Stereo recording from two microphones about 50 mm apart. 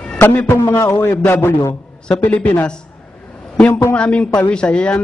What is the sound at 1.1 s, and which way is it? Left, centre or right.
A man's voice, left.